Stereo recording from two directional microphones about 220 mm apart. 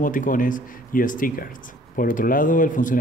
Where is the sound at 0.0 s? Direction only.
40° left (ahead or behind).